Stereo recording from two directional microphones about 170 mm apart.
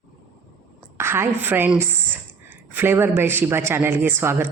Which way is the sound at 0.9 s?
15° right (ahead or behind).